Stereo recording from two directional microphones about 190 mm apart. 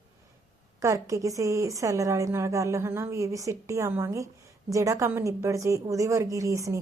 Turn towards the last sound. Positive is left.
turn(degrees=-15)  # may be behind; listen again after turning